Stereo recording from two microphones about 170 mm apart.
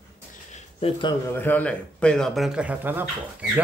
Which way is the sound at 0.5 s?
30° left (ahead or behind).